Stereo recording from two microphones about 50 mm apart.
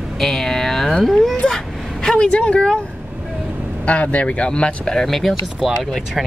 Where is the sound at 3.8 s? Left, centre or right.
Left.